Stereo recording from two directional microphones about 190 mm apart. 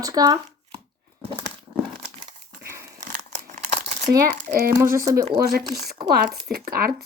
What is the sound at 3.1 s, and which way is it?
Crumpling, 40° right (ahead or behind).